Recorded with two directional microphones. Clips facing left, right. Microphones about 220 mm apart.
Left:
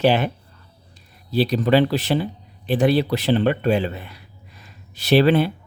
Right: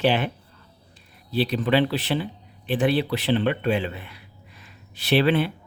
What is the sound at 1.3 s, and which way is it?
Speech, 40° left (ahead or behind).